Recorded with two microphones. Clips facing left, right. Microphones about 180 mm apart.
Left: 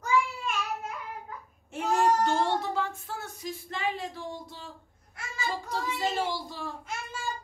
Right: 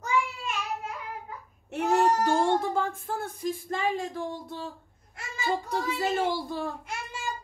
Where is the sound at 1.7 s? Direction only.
60° right (ahead or behind).